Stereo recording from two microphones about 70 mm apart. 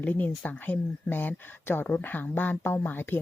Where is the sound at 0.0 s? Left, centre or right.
Left.